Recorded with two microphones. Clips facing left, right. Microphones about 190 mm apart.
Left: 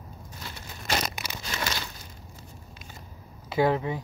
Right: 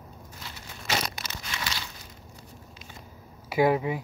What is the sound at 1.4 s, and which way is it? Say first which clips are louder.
Crumpling: left 4 dB; 45° left (ahead or behind).